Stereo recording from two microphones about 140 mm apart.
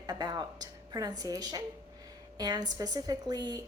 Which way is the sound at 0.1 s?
30° right (ahead or behind).